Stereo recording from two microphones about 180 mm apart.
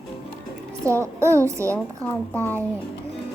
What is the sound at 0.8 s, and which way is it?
Speech, 15° right (ahead or behind).